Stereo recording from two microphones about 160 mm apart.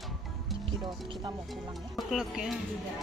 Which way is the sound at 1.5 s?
Centre (ahead or behind).